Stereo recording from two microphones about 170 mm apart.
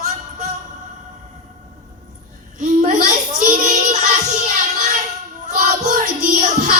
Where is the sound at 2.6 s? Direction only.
45° right (ahead or behind).